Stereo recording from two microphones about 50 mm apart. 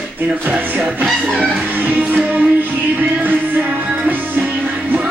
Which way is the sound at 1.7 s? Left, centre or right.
Right.